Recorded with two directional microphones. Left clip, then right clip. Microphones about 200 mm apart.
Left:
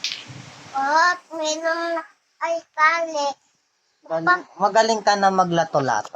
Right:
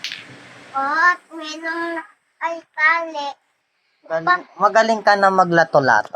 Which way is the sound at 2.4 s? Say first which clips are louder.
Even; 15° left (ahead or behind).